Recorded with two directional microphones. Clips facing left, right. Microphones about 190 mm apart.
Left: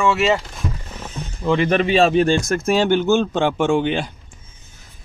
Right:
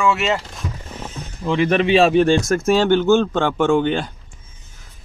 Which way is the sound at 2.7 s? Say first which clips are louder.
Right 2 dB; 15° left (ahead or behind).